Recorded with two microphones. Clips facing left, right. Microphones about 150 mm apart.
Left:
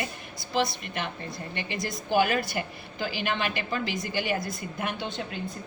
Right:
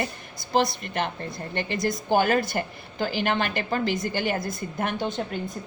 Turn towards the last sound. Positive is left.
turn(degrees=-45)  # may be behind; listen again after turning